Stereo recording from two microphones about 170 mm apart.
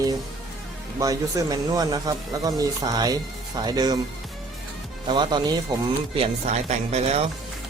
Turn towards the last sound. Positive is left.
turn(degrees=-40)  # may be behind; listen again after turning